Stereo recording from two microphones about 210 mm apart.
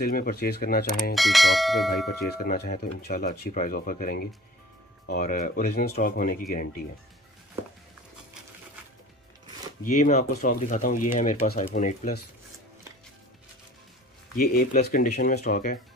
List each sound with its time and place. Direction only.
0.0 s speech: 45° left (ahead or behind)
1.1 s speech: centre (ahead or behind)
2.3 s speech: 50° left (ahead or behind)
9.8 s speech: 35° left (ahead or behind)
14.3 s speech: 45° left (ahead or behind)